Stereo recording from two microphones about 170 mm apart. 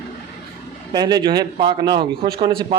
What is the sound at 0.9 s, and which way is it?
A man's voice, 25° right (ahead or behind).